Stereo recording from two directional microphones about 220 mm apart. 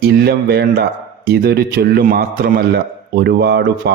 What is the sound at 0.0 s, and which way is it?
A man's voice, 45° right (ahead or behind).